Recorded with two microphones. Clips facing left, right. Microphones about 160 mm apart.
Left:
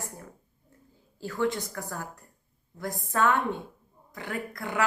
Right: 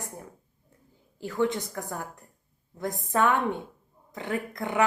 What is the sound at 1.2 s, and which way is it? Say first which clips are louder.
A woman's voice: right 2 dB; 20° right (ahead or behind).